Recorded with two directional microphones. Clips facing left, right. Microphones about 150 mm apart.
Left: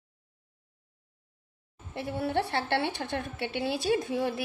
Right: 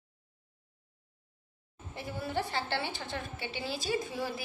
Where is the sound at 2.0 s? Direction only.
65° left (ahead or behind).